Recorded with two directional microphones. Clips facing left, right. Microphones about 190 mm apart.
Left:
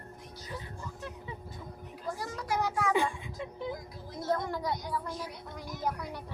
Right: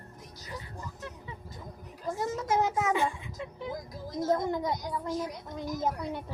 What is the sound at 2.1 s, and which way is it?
Speech, 20° right (ahead or behind).